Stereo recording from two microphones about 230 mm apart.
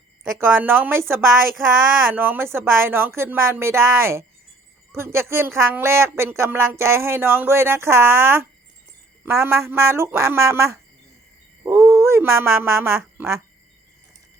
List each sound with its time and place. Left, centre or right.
0.3 s speech: centre
11.6 s a sound: centre
12.4 s speech: centre
13.0 s quack: centre